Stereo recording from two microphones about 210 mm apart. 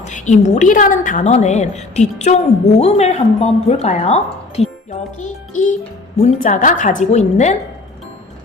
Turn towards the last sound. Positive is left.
turn(degrees=35)  # may be behind; listen again after turning